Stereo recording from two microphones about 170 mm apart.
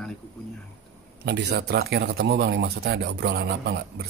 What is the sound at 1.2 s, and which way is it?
Speech, 85° right.